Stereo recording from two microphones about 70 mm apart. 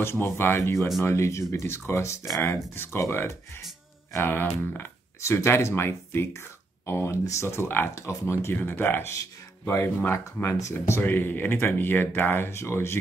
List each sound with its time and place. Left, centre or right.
0.0 s speech: left
2.5 s speech: left
8.5 s speech: left